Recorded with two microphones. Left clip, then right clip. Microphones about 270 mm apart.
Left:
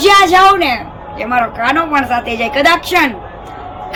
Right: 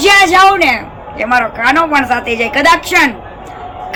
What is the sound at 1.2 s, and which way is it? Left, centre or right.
A woman's voice, centre.